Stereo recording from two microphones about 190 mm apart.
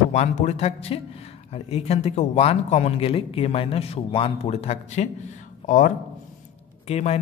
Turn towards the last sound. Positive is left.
turn(degrees=35)  # may be behind; listen again after turning